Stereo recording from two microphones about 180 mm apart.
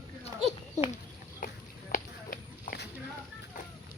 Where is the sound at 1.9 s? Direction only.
55° left (ahead or behind).